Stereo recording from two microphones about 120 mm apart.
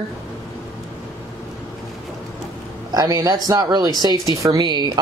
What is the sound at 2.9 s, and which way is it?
Speech, 35° right (ahead or behind).